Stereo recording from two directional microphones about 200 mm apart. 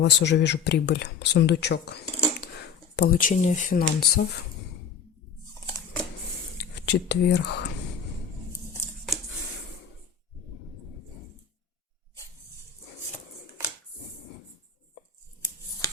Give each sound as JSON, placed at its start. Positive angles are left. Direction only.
{"t": 0.0, "sound": "speech", "side_deg": 60}
{"t": 5.5, "sound": "a sound", "side_deg": 15}
{"t": 6.6, "sound": "speech", "side_deg": 55}